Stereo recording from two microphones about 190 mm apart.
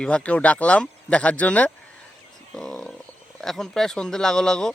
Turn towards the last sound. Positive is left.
turn(degrees=5)  # may be behind; listen again after turning